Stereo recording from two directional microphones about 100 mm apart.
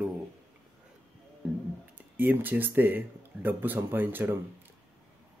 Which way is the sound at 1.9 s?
20° right (ahead or behind).